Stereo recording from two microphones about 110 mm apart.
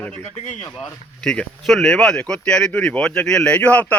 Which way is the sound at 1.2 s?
5° left (ahead or behind).